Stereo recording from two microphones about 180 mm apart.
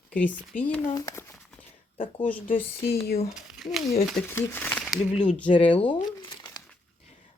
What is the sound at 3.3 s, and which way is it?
Speech, centre (ahead or behind).